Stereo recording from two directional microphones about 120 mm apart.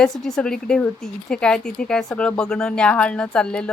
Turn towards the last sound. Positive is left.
turn(degrees=10)  # may be behind; listen again after turning